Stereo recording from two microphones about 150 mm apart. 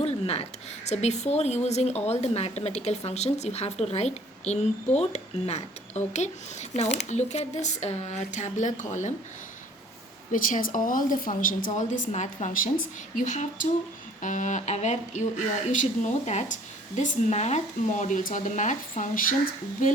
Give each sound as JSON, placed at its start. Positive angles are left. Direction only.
{"t": 0.0, "sound": "a sound", "side_deg": 45}
{"t": 0.9, "sound": "a woman's voice", "side_deg": 50}
{"t": 10.3, "sound": "speech", "side_deg": 65}